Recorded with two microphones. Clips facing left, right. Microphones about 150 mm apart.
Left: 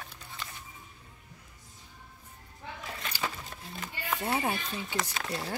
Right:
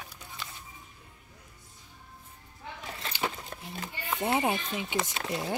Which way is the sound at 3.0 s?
25° right (ahead or behind).